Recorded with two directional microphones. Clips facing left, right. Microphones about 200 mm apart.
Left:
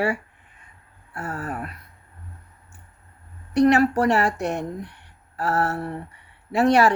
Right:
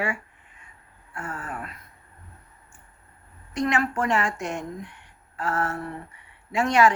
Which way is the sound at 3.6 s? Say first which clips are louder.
Left 8 dB; 40° left (ahead or behind).